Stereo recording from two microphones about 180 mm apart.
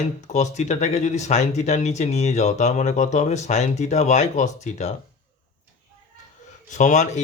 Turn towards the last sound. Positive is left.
turn(degrees=40)  # may be behind; listen again after turning